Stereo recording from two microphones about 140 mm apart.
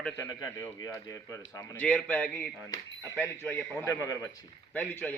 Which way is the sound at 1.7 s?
10° left (ahead or behind).